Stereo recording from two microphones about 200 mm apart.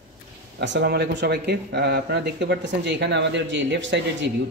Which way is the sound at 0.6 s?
60° right (ahead or behind).